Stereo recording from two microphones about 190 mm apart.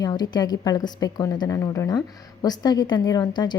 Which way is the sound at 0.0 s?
20° left (ahead or behind).